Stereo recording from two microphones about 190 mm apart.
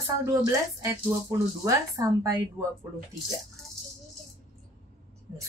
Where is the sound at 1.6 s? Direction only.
15° right (ahead or behind).